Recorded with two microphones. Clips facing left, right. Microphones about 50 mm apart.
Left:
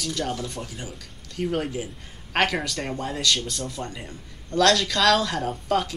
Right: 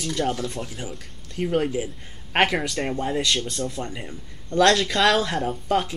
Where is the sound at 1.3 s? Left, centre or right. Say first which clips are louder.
Right 3 dB; centre.